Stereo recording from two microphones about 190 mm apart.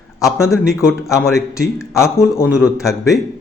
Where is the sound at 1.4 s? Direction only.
15° left (ahead or behind).